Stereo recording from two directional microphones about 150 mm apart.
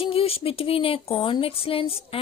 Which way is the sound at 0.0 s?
40° left (ahead or behind).